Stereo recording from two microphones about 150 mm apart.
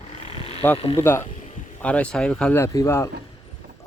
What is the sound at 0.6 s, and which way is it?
Speech, 15° left (ahead or behind).